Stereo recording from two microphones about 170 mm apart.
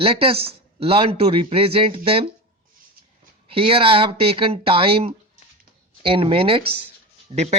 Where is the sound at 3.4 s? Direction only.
35° right (ahead or behind).